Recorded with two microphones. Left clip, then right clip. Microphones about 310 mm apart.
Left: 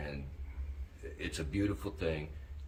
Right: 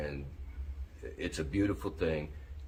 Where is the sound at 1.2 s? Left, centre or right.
Centre.